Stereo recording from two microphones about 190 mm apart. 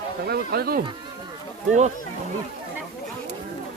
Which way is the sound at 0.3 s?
55° right (ahead or behind).